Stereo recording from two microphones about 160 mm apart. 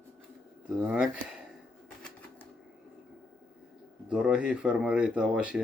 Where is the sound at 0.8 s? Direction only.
5° right (ahead or behind).